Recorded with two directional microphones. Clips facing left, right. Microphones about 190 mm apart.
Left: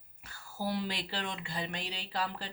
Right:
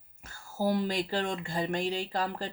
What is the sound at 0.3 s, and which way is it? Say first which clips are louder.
Speech: right 7 dB; 45° right (ahead or behind).